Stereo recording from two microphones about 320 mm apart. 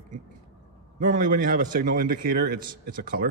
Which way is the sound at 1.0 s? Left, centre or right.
Right.